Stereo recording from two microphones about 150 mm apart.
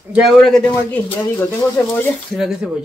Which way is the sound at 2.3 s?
5° right (ahead or behind).